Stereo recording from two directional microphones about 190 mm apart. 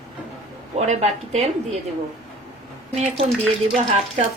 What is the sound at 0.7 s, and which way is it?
Speech, 35° right (ahead or behind).